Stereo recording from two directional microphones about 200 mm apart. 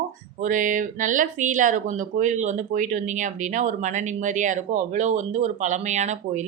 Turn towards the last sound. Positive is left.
turn(degrees=-35)  # may be behind; listen again after turning